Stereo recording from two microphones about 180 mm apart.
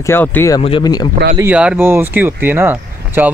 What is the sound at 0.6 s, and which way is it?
Speech, 30° left (ahead or behind).